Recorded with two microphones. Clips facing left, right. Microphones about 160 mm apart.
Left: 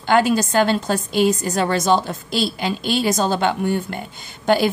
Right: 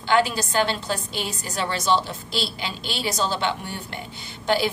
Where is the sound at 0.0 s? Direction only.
50° left (ahead or behind).